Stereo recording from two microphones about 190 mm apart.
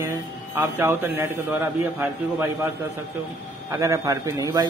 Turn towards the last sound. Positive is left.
turn(degrees=-15)  # may be behind; listen again after turning